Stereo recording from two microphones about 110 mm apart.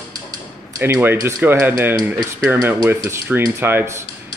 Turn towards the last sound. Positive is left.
turn(degrees=-20)  # may be behind; listen again after turning